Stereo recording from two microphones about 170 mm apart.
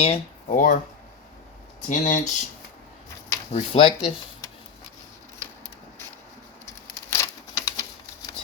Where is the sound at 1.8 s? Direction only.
50° left (ahead or behind).